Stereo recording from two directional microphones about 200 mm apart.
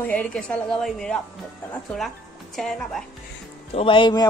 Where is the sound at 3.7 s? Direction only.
25° left (ahead or behind).